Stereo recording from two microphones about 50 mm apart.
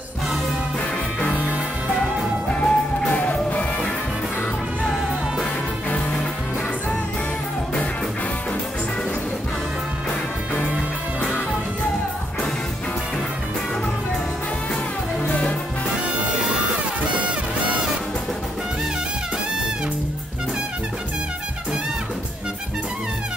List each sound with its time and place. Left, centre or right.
1.2 s music: left
2.4 s music: centre
3.1 s music: left
15.2 s music: left